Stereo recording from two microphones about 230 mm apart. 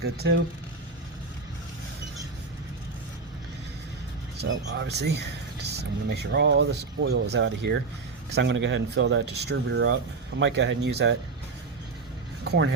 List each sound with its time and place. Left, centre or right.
0.0 s speech: right
4.4 s speech: right
12.5 s speech: right